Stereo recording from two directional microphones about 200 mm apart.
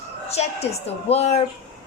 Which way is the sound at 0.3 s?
30° left (ahead or behind).